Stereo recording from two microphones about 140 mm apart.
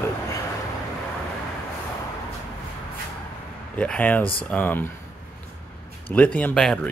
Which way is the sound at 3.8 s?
10° left (ahead or behind).